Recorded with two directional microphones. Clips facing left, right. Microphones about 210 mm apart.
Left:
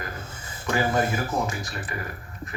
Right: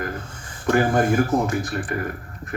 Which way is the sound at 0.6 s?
55° right (ahead or behind).